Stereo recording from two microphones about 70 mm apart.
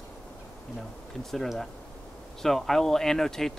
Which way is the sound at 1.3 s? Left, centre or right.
Centre.